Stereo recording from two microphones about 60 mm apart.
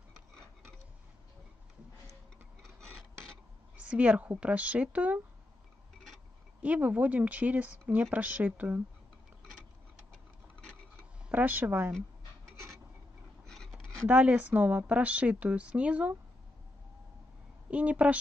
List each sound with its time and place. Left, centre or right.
2.6 s filing: centre
3.7 s a woman's voice: right
6.6 s a woman's voice: right
11.2 s speech: right
14.0 s a woman's voice: right
17.6 s speech: right